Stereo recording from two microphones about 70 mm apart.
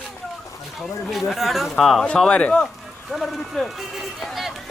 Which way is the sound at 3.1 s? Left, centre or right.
Centre.